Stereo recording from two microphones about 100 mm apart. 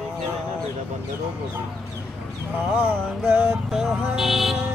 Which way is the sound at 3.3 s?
20° right (ahead or behind).